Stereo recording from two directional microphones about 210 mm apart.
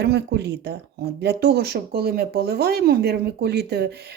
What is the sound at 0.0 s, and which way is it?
Speech, 50° right (ahead or behind).